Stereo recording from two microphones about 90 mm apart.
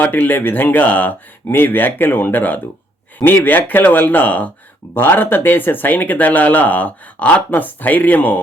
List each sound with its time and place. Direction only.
0.0 s speech: 20° left (ahead or behind)